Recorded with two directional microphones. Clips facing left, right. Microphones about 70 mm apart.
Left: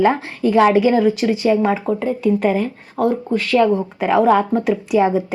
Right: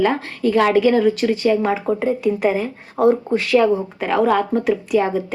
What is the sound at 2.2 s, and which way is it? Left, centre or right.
Speech, centre.